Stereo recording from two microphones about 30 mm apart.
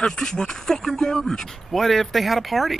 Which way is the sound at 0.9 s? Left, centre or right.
Centre.